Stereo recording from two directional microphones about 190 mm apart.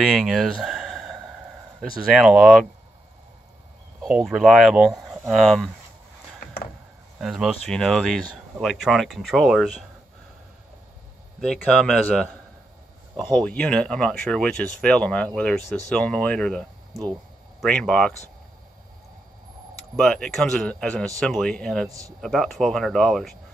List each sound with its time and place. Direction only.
0.0 s speech: centre (ahead or behind)
4.0 s speech: centre (ahead or behind)
7.2 s speech: centre (ahead or behind)
11.4 s speech: 5° left (ahead or behind)
20.0 s speech: 5° left (ahead or behind)